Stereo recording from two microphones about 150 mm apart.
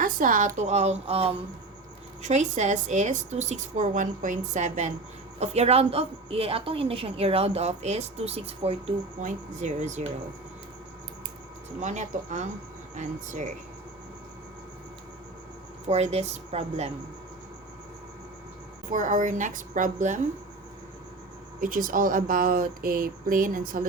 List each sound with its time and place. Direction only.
0.0 s a woman's voice: 65° right (ahead or behind); by 1.4 s 40° right (ahead or behind)
2.2 s a woman's voice: 50° right (ahead or behind)
11.8 s a woman's voice: 55° right (ahead or behind)
15.9 s a woman's voice: 45° right (ahead or behind)
18.9 s a woman's voice: 60° right (ahead or behind)
21.6 s speech: 65° right (ahead or behind)